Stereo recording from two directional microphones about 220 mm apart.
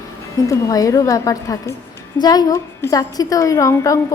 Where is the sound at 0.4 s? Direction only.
15° left (ahead or behind).